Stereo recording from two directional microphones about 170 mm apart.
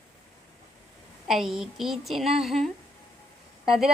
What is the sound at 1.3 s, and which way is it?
A woman's voice, centre (ahead or behind).